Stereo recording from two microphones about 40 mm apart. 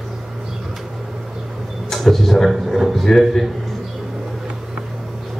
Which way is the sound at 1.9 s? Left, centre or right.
Centre.